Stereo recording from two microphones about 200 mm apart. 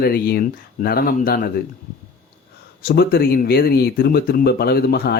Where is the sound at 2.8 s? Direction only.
50° left (ahead or behind).